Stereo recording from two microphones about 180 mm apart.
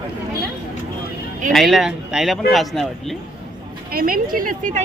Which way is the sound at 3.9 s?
55° right (ahead or behind).